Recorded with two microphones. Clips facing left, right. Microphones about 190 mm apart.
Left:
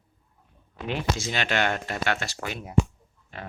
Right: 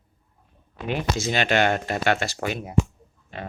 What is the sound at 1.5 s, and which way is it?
Speech, 40° right (ahead or behind).